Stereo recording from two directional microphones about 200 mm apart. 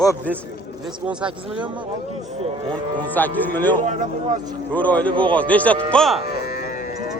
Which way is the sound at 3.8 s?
35° right (ahead or behind).